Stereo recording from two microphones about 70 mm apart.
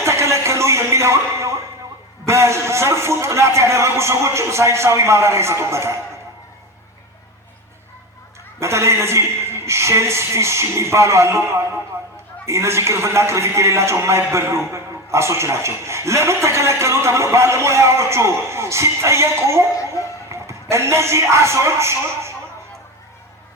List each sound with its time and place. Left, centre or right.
0.0 s a sound: right
2.2 s a man's voice: right
8.5 s a man's voice: right